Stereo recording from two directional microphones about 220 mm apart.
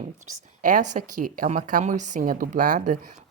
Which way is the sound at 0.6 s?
35° right (ahead or behind).